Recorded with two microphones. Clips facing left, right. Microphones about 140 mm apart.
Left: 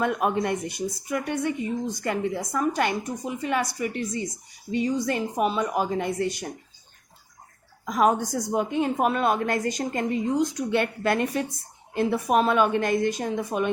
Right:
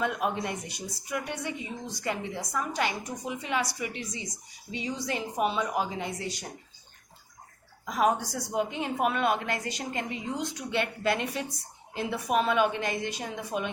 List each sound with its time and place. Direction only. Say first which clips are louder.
0.0 s a woman's voice: left 5 dB; 50° left (ahead or behind)
7.9 s a woman's voice: left 4 dB; 45° left (ahead or behind)